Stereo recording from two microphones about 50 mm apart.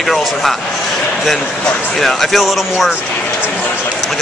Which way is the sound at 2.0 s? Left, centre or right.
Centre.